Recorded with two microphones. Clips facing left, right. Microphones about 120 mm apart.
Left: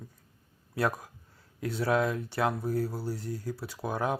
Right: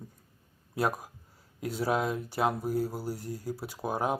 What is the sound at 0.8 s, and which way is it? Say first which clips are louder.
Speech: even; 15° right (ahead or behind).